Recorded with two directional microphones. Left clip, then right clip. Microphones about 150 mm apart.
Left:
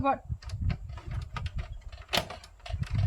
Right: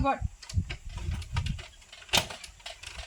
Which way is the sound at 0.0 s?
10° left (ahead or behind).